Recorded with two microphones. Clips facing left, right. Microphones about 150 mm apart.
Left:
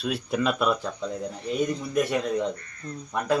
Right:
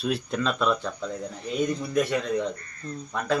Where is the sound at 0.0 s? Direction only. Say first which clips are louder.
Left 1 dB; 5° left (ahead or behind).